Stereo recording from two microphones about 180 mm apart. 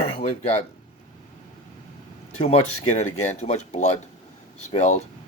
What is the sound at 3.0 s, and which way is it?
Speech, 40° left (ahead or behind).